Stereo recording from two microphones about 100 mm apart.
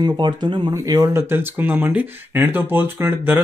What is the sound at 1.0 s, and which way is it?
Speech, 25° right (ahead or behind).